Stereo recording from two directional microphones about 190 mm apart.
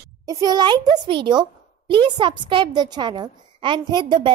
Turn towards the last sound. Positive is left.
turn(degrees=-20)  # may be behind; listen again after turning